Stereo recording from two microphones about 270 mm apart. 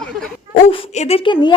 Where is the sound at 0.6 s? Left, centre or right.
Left.